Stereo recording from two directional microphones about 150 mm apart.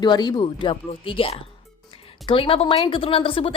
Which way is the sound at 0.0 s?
30° left (ahead or behind).